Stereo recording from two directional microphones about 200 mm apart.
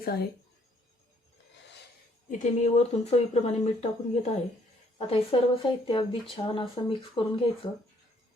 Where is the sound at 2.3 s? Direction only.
35° left (ahead or behind).